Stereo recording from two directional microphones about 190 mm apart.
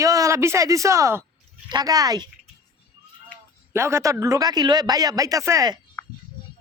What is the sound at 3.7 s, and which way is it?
Speech, 15° right (ahead or behind).